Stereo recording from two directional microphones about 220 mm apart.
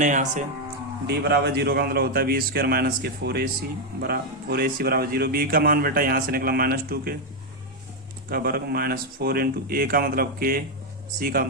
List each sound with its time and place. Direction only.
0.0 s speech: 35° right (ahead or behind)
1.0 s a man's voice: 50° right (ahead or behind)
8.3 s a man's voice: 45° right (ahead or behind)